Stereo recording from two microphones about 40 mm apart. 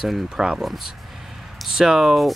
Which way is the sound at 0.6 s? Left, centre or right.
Centre.